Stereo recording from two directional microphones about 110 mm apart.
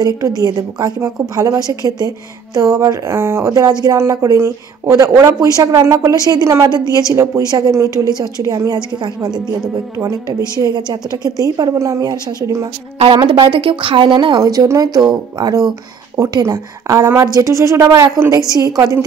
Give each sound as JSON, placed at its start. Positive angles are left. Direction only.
{"t": 0.0, "sound": "a woman's voice", "side_deg": -35}
{"t": 9.9, "sound": "a woman's voice", "side_deg": -30}
{"t": 14.4, "sound": "a woman's voice", "side_deg": -35}